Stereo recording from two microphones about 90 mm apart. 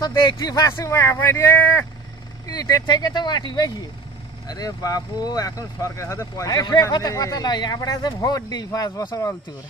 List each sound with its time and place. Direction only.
0.0 s speech: 45° left (ahead or behind); by 1.9 s 25° left (ahead or behind)
2.4 s speech: 45° left (ahead or behind)